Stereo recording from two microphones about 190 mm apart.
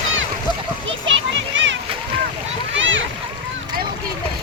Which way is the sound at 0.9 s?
80° right.